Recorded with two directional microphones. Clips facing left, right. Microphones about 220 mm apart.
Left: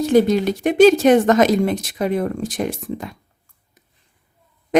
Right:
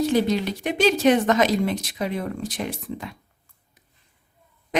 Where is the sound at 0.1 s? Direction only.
50° left (ahead or behind).